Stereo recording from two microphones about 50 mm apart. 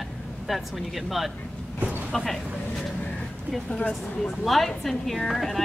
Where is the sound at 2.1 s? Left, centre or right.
Centre.